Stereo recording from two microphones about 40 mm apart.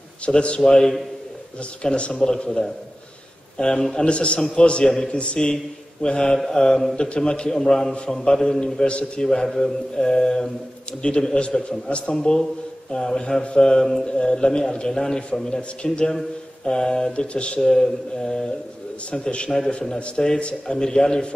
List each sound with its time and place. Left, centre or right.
0.2 s a man's voice: left
0.6 s speech: centre
1.8 s a man's voice: left
3.5 s a man's voice: centre
8.8 s a man's voice: left
17.1 s a man's voice: left
17.6 s a man's voice: centre